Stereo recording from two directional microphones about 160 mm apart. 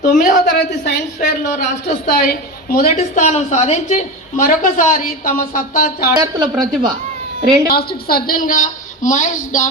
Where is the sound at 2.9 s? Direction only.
45° left (ahead or behind).